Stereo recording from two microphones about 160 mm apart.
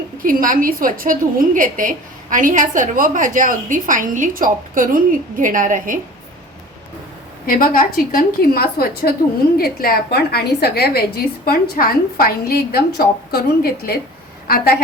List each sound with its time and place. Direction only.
0.2 s a woman's voice: 60° right (ahead or behind)
7.4 s a woman's voice: 60° left (ahead or behind)